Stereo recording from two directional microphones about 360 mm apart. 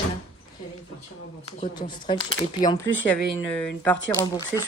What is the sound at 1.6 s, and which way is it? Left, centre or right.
A woman's voice, centre.